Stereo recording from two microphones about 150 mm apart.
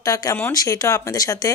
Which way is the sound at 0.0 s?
25° left (ahead or behind).